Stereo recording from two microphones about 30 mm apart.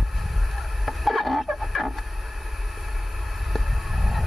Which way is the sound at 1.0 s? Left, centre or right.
Centre.